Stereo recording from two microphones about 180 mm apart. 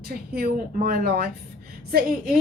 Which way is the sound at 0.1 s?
55° right (ahead or behind).